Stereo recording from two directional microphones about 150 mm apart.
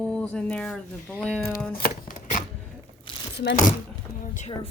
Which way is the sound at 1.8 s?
65° left (ahead or behind).